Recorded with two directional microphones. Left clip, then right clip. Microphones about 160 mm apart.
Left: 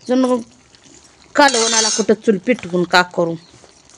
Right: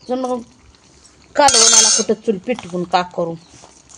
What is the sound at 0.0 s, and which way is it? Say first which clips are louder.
Speech: left 5 dB; 75° left (ahead or behind).